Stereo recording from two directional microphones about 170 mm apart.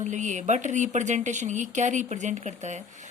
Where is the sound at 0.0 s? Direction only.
45° right (ahead or behind).